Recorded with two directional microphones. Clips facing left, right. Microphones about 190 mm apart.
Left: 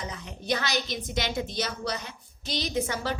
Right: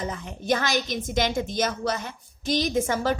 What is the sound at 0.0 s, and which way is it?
A woman's voice, 50° right (ahead or behind).